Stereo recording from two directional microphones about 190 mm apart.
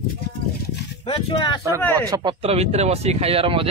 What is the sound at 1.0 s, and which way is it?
Speech, 30° left (ahead or behind).